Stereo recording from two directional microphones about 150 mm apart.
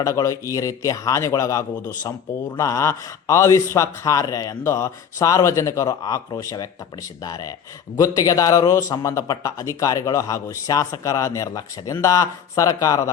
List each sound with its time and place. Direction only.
0.0 s speech: 20° left (ahead or behind)